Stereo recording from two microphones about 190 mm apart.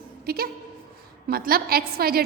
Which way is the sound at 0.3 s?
55° right (ahead or behind).